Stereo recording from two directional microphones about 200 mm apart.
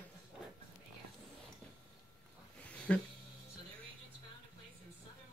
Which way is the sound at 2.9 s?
5° left (ahead or behind).